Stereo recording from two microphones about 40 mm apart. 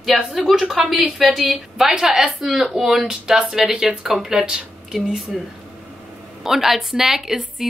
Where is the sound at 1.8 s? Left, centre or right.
Centre.